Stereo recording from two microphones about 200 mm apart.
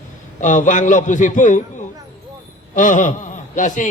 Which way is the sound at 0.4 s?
40° left (ahead or behind).